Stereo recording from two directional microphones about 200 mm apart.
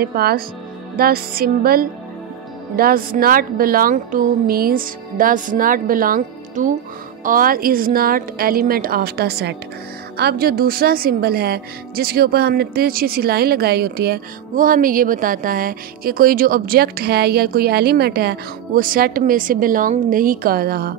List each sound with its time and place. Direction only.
0.0 s a woman's voice: 50° right (ahead or behind)